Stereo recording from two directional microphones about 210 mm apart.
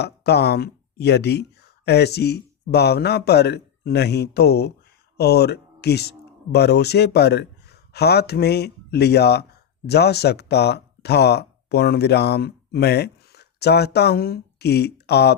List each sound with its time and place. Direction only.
0.0 s speech: 50° left (ahead or behind)